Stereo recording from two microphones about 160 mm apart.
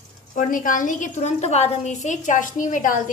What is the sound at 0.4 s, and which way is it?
A woman's voice, 55° left (ahead or behind).